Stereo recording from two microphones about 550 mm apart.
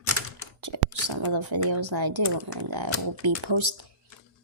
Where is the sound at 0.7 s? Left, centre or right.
Right.